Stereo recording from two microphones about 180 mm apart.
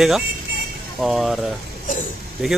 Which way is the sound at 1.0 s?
Centre (ahead or behind).